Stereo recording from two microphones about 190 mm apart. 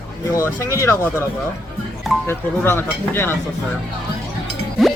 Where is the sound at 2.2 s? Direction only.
10° left (ahead or behind).